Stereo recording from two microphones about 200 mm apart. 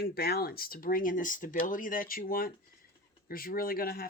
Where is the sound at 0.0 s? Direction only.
50° left (ahead or behind).